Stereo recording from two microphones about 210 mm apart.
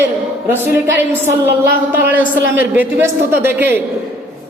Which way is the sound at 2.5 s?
10° right (ahead or behind).